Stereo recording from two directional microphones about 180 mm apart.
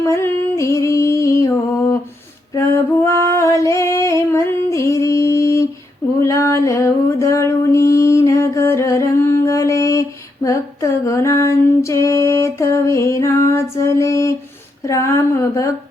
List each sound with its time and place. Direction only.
0.1 s music: 15° left (ahead or behind)
2.6 s female singing: 15° left (ahead or behind)
6.1 s a sound: 15° left (ahead or behind)
14.8 s speech: 15° left (ahead or behind)